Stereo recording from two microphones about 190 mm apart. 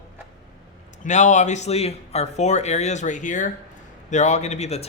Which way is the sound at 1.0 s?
40° left (ahead or behind).